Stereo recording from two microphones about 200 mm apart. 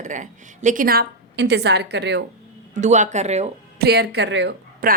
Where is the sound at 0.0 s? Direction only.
40° right (ahead or behind); by 2.2 s 60° right (ahead or behind).